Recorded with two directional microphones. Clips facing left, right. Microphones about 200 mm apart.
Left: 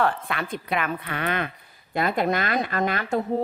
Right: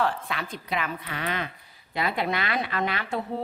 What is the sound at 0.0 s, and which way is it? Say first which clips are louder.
A woman's voice: left 3 dB; 55° left (ahead or behind).